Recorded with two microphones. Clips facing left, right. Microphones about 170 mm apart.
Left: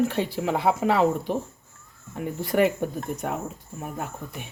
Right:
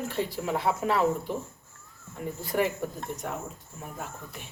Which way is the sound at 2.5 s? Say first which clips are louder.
Left 6 dB; 65° left (ahead or behind).